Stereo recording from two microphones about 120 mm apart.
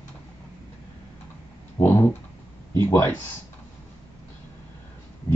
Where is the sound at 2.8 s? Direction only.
20° left (ahead or behind).